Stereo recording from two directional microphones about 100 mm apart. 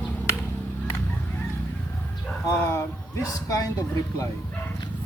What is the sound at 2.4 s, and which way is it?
Speech, 30° left (ahead or behind).